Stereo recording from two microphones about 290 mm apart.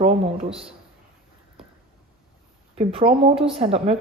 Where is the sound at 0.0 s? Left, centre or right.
Right.